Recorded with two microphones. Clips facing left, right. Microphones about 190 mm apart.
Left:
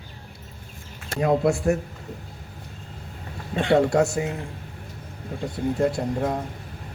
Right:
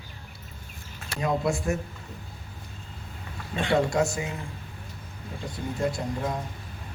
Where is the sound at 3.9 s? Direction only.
65° left (ahead or behind).